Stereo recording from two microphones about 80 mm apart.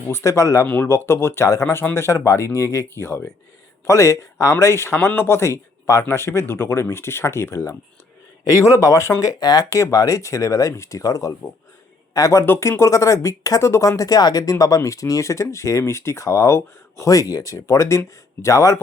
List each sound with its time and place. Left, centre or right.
0.1 s speech: left
12.5 s speech: left